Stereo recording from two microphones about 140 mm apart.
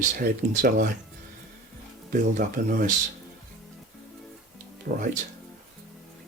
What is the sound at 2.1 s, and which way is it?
Speech, 70° right (ahead or behind).